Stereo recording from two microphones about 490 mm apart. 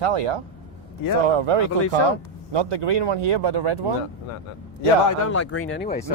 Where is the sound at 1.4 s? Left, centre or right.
Right.